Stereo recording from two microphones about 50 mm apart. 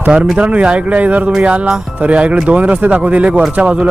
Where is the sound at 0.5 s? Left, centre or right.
Right.